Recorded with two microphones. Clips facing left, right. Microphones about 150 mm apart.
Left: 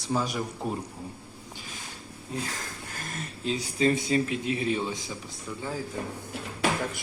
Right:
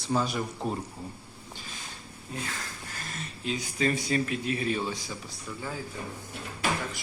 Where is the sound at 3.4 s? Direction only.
35° left (ahead or behind).